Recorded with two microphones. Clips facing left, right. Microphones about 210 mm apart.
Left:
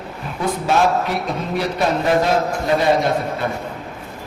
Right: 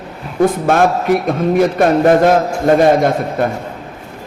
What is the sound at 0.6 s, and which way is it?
A man's voice, 50° right (ahead or behind).